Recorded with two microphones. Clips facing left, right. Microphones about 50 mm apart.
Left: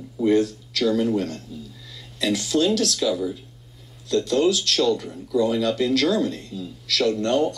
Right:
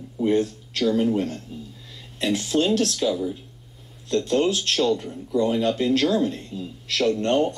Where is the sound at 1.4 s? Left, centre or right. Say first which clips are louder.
Even; right.